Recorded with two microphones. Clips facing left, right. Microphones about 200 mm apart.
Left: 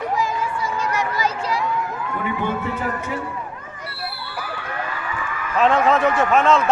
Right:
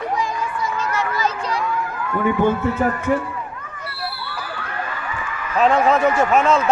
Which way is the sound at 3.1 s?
55° right (ahead or behind).